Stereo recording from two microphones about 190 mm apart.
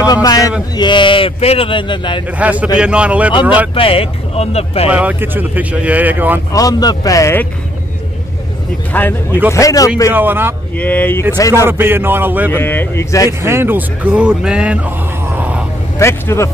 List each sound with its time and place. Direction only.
0.0 s speech: 20° left (ahead or behind)
2.3 s speech: 5° right (ahead or behind)
3.7 s speech: 30° left (ahead or behind)
4.8 s speech: 10° right (ahead or behind)
6.5 s speech: 20° left (ahead or behind)
8.9 s speech: 10° left (ahead or behind)
10.1 s speech: 10° right (ahead or behind)
10.8 s speech: 10° left (ahead or behind)
11.5 s speech: 10° right (ahead or behind)
12.5 s speech: 10° left (ahead or behind)
13.4 s speech: 10° right (ahead or behind)
16.0 s speech: 15° left (ahead or behind)